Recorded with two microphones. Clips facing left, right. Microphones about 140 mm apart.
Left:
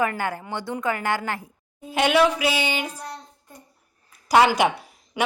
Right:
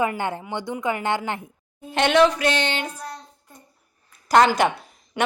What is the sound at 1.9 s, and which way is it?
Speech, 5° left (ahead or behind).